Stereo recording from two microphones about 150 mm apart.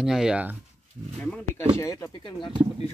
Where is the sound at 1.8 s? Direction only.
20° left (ahead or behind).